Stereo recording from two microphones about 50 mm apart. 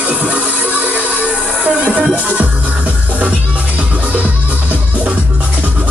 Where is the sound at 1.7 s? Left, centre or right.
Right.